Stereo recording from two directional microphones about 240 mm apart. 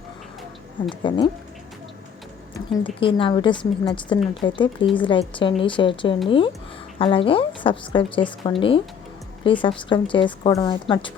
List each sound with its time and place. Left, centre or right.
0.9 s a woman's voice: centre
2.8 s a woman's voice: left